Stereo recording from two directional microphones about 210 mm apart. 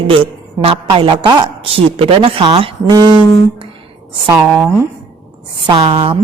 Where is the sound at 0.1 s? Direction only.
25° right (ahead or behind).